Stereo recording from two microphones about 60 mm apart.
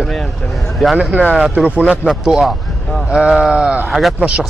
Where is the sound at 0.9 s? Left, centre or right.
Right.